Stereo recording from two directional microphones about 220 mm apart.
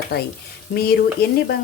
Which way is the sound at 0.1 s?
45° left (ahead or behind).